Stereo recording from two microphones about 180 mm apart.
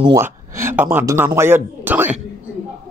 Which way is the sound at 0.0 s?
15° right (ahead or behind).